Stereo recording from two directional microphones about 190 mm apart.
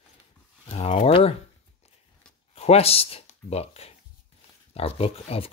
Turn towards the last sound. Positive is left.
turn(degrees=30)  # may be behind; listen again after turning